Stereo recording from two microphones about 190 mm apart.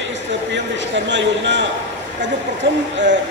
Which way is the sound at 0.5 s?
70° right (ahead or behind).